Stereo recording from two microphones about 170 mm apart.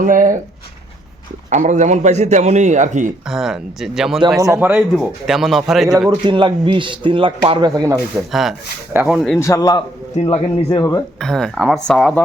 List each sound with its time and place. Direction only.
0.0 s a man's voice: 50° right (ahead or behind)
1.5 s a man's voice: 45° right (ahead or behind)
3.2 s a man's voice: 5° right (ahead or behind)
6.2 s speech: 30° right (ahead or behind)
8.1 s a man's voice: centre (ahead or behind)
9.4 s speech: 20° left (ahead or behind)
10.8 s speech: 15° left (ahead or behind)
11.2 s a man's voice: 5° left (ahead or behind)